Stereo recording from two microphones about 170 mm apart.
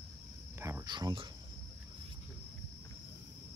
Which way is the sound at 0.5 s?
15° right (ahead or behind).